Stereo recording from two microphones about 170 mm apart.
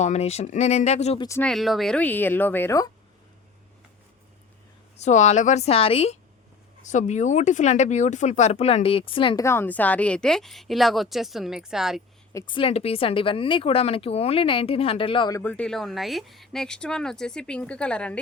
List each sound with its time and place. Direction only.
0.0 s speech: 40° left (ahead or behind)
1.4 s a woman's voice: centre (ahead or behind); by 2.9 s 20° left (ahead or behind)
4.9 s speech: 40° left (ahead or behind)
6.8 s speech: 45° left (ahead or behind)
9.4 s speech: 15° left (ahead or behind); by 12.0 s centre (ahead or behind)
12.3 s speech: 20° left (ahead or behind)
12.5 s speech: 35° left (ahead or behind)
15.4 s speech: 10° left (ahead or behind)